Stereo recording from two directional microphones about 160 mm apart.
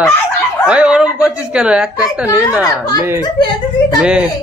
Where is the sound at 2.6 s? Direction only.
25° left (ahead or behind).